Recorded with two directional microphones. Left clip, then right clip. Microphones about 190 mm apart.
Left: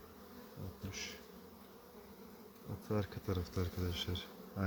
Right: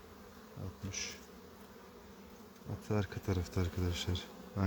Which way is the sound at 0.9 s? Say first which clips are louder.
Right 4 dB; 25° right (ahead or behind).